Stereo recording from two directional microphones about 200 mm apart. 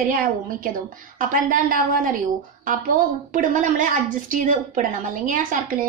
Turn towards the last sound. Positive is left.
turn(degrees=-40)  # may be behind; listen again after turning